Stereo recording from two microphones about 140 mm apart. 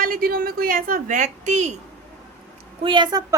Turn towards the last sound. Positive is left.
turn(degrees=-30)  # may be behind; listen again after turning